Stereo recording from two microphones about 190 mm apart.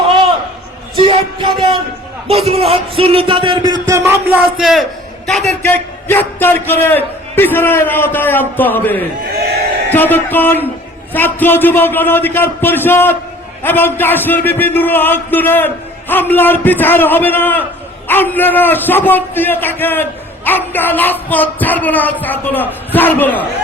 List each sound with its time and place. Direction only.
0.9 s music: 30° right (ahead or behind)
2.2 s a man's voice: 30° right (ahead or behind); by 4.2 s 15° right (ahead or behind)
4.4 s a man's voice: centre (ahead or behind)